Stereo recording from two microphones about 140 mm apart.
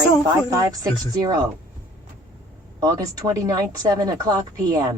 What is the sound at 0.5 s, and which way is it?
Speech, 25° right (ahead or behind).